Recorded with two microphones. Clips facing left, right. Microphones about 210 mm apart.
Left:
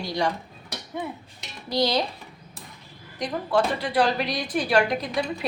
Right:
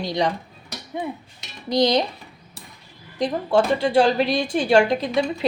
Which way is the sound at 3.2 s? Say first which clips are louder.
Right 4 dB; 25° right (ahead or behind).